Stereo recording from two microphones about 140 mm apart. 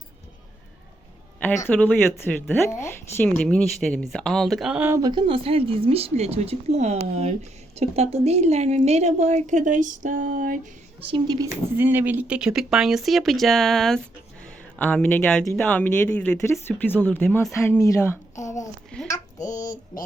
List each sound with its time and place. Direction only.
1.6 s speech: 10° left (ahead or behind); by 4.9 s 5° right (ahead or behind)
4.9 s a woman's voice: 25° right (ahead or behind); by 10.6 s 70° right (ahead or behind)
11.0 s a woman's voice: 35° right (ahead or behind)
11.8 s speech: 15° right (ahead or behind); by 18.7 s 20° left (ahead or behind)
18.9 s speech: 10° left (ahead or behind)
19.4 s child singing: 70° left (ahead or behind)